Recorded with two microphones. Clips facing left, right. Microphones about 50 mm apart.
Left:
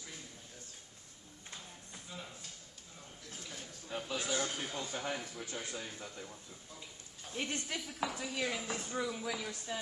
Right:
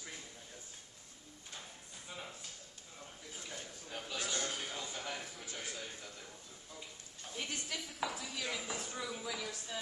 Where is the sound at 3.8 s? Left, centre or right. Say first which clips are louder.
Left 4 dB; centre.